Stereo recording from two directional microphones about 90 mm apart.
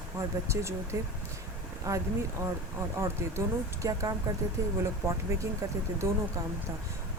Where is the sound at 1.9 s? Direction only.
35° right (ahead or behind).